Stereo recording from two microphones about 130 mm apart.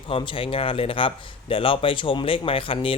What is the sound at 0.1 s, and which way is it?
Speech, 45° left (ahead or behind).